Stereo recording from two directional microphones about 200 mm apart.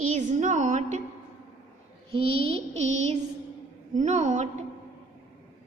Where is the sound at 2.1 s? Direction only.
25° right (ahead or behind).